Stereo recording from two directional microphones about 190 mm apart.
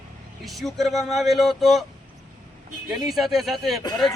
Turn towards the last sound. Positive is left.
turn(degrees=0)  # may be behind; listen again after turning